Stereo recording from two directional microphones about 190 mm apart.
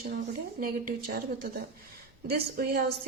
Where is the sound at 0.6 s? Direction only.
50° right (ahead or behind).